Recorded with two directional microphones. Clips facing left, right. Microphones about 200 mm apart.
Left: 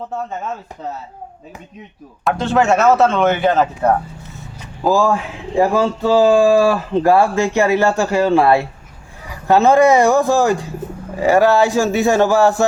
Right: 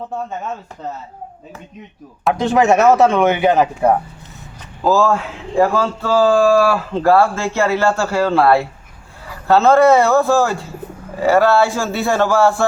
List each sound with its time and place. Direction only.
2.4 s speech: 15° right (ahead or behind)
4.8 s speech: 15° left (ahead or behind)